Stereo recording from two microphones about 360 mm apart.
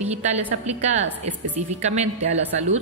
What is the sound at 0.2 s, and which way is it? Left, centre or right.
A woman's voice, centre.